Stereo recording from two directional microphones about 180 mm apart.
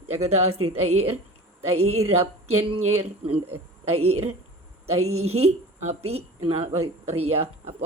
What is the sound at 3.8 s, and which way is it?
Speech, 35° right (ahead or behind).